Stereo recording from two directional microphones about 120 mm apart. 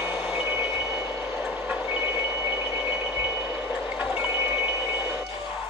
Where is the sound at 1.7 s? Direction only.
15° right (ahead or behind).